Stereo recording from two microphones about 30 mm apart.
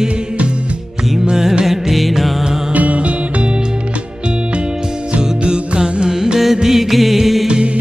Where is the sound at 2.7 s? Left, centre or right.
Right.